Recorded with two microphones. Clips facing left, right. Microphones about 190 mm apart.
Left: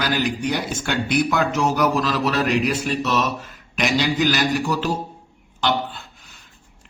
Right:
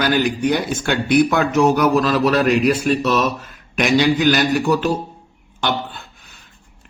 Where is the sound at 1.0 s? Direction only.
55° right (ahead or behind).